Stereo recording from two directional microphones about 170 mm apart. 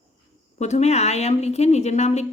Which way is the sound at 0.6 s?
40° left (ahead or behind).